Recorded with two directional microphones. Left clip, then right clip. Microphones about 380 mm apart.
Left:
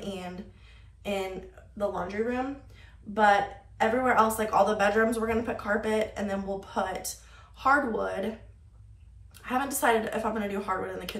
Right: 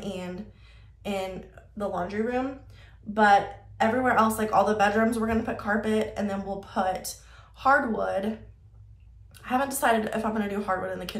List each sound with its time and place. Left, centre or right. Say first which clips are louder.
0.0 s a sound: right 2 dB; centre
1.0 s speech: even; centre
9.3 s speech: right 3 dB; centre